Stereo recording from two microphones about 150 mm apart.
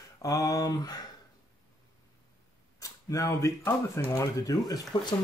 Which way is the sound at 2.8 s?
20° left (ahead or behind).